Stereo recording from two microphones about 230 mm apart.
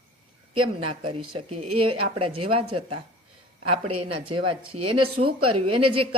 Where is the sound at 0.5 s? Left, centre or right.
Right.